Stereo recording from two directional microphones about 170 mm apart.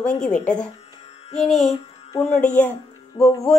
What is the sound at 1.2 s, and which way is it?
Music, 40° left (ahead or behind).